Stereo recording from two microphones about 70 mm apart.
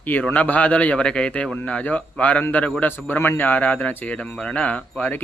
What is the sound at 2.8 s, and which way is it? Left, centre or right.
A man's voice, left.